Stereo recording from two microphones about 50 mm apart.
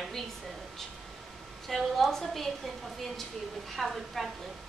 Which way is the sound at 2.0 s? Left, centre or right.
Centre.